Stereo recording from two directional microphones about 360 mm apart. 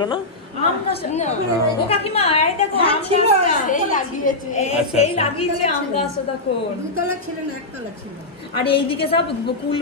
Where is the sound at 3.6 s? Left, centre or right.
Left.